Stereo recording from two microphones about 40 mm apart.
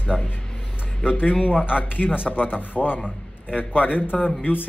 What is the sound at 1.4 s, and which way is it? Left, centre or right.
Speech, left.